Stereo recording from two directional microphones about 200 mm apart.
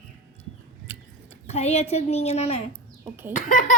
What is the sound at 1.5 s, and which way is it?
Laughter, 35° left (ahead or behind).